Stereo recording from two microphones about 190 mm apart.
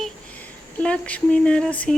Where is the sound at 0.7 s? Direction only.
5° left (ahead or behind).